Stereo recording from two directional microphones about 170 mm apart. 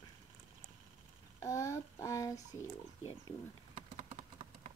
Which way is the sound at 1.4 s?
20° left (ahead or behind).